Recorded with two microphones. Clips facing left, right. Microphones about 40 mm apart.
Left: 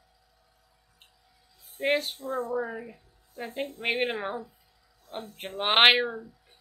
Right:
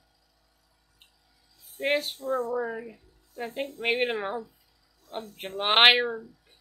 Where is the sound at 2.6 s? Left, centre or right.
Centre.